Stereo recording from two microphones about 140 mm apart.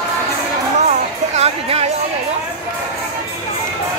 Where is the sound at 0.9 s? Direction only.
50° right (ahead or behind).